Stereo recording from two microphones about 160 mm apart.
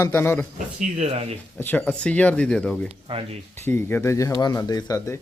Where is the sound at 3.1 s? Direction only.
35° right (ahead or behind).